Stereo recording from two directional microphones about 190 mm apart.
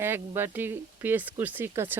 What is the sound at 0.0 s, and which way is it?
Speech, 10° right (ahead or behind).